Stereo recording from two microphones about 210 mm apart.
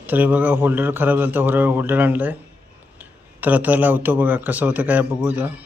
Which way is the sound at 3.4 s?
5° right (ahead or behind).